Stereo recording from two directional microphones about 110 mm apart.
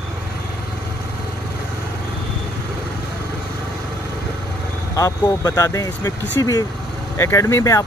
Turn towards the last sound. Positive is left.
turn(degrees=25)  # may be behind; listen again after turning